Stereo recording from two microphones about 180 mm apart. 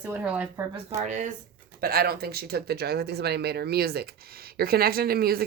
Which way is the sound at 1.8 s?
60° right (ahead or behind).